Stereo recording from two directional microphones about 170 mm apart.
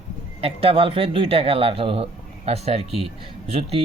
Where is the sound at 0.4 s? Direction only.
35° right (ahead or behind).